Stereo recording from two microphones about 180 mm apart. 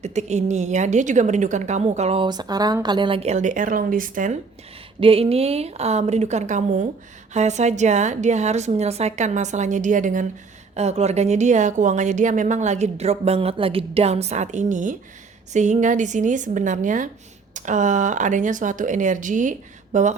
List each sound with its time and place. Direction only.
0.0 s a woman's voice: 40° right (ahead or behind)
4.9 s a woman's voice: 30° right (ahead or behind)